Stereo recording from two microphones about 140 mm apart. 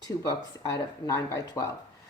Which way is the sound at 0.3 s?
25° left (ahead or behind).